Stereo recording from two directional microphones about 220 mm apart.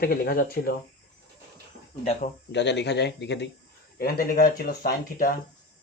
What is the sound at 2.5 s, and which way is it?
Speech, 50° left (ahead or behind).